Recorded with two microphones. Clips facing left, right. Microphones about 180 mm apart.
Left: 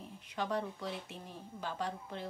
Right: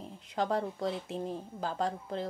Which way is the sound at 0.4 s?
35° right (ahead or behind).